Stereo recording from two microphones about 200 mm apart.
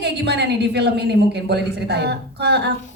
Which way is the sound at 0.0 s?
55° right (ahead or behind).